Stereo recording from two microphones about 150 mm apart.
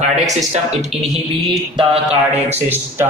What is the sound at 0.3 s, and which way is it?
Speech, 50° right (ahead or behind).